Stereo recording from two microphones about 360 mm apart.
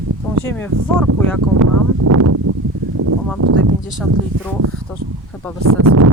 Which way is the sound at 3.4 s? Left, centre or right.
Right.